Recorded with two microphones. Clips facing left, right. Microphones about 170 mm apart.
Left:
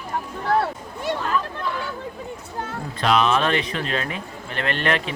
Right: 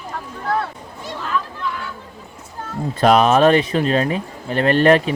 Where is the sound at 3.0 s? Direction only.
45° right (ahead or behind).